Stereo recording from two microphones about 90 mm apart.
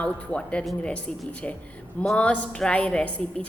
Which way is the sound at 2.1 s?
15° left (ahead or behind).